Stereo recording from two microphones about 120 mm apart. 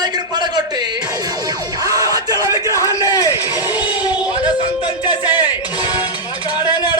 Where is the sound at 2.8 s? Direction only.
30° left (ahead or behind).